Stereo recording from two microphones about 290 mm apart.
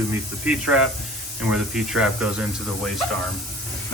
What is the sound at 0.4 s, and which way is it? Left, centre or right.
Speech, centre.